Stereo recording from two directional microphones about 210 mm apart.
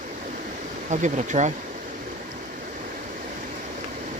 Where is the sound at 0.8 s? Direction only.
35° right (ahead or behind).